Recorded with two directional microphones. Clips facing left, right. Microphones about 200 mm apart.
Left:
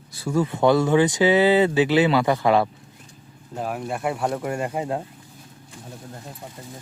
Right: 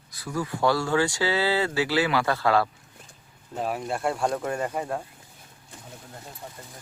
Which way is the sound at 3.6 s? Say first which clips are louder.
Left 1 dB; 5° left (ahead or behind).